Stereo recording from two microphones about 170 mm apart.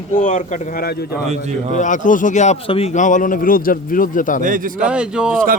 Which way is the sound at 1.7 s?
50° left (ahead or behind).